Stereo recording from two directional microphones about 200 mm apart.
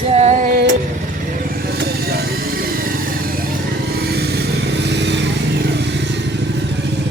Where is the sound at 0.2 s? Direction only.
40° right (ahead or behind).